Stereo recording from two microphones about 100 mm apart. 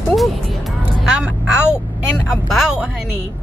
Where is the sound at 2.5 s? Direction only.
Centre (ahead or behind).